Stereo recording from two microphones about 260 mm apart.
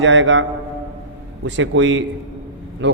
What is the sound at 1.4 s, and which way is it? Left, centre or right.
A man's voice, right.